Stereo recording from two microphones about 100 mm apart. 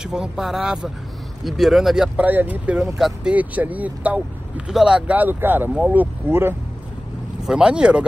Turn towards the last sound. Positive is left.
turn(degrees=-10)  # may be behind; listen again after turning